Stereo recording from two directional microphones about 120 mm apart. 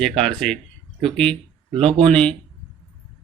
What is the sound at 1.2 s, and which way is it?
Speech, 50° right (ahead or behind).